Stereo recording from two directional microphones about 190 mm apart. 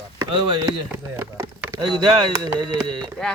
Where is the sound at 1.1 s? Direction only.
15° right (ahead or behind).